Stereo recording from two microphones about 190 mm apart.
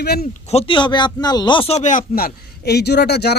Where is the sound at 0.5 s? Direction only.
25° left (ahead or behind).